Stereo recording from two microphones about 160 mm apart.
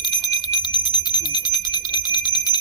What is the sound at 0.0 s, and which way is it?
Bicycle bell, 25° left (ahead or behind).